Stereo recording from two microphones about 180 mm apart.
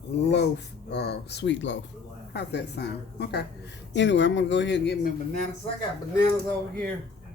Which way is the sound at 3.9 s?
80° left.